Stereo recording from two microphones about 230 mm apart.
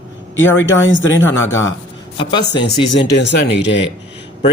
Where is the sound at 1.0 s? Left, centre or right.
Left.